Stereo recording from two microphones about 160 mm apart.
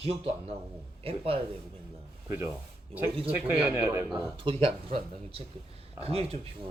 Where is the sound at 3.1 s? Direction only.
35° right (ahead or behind).